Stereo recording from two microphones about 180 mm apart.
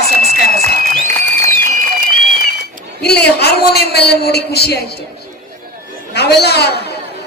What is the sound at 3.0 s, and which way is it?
A woman's voice, 65° left (ahead or behind).